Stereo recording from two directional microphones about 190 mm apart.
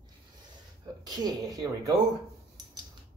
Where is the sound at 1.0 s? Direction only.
20° right (ahead or behind).